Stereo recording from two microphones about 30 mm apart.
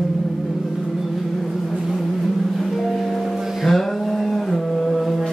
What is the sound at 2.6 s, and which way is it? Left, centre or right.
Music, centre.